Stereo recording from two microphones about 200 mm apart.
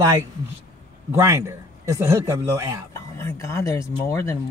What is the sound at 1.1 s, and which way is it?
Speech, 15° right (ahead or behind).